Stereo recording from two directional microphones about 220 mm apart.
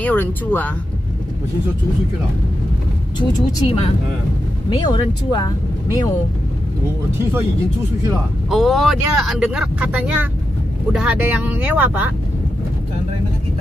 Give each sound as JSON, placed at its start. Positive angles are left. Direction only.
{"t": 0.0, "sound": "speech", "side_deg": 10}
{"t": 3.2, "sound": "speech", "side_deg": 25}
{"t": 8.5, "sound": "speech", "side_deg": 0}